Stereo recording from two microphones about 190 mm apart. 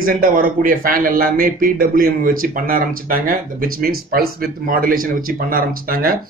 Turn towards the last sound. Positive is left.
turn(degrees=-50)  # may be behind; listen again after turning